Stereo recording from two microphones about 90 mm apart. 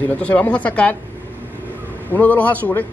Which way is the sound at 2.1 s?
20° left (ahead or behind).